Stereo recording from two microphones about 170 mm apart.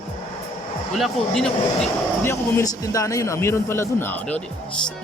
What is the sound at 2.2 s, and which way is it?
A man's voice, 20° left (ahead or behind).